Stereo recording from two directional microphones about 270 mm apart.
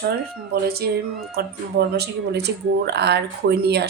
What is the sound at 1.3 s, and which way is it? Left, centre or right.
Speech, right.